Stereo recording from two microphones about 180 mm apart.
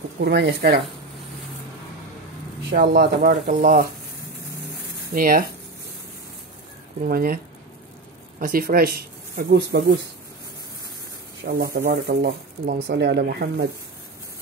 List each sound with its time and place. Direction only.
0.2 s speech: 70° right (ahead or behind)
2.7 s speech: 55° right (ahead or behind)
5.1 s speech: 55° right (ahead or behind)
7.1 s speech: 55° right (ahead or behind)
8.4 s speech: 50° right (ahead or behind)
11.4 s speech: 55° right (ahead or behind)